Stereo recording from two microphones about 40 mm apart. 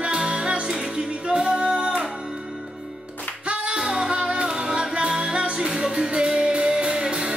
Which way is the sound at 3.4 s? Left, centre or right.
Right.